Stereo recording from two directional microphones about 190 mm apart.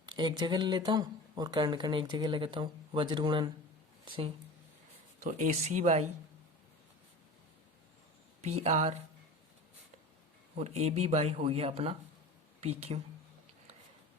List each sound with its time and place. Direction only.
0.0 s speech: 25° right (ahead or behind)
5.2 s speech: 40° right (ahead or behind)
8.4 s speech: 35° right (ahead or behind)
10.6 s speech: 35° right (ahead or behind)